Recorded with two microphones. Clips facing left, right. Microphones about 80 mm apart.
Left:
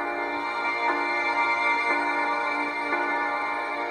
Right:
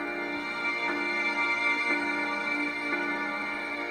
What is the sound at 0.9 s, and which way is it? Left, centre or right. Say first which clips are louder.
Music: left 6 dB; left.